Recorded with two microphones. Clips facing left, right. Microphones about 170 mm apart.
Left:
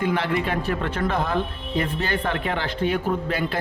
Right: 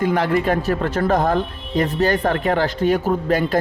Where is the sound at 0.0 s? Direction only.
40° right (ahead or behind).